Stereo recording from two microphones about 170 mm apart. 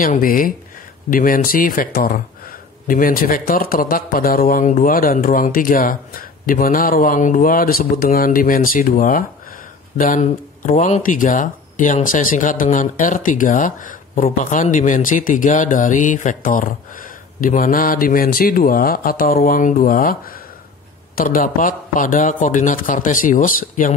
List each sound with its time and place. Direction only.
0.0 s speech: 55° left (ahead or behind)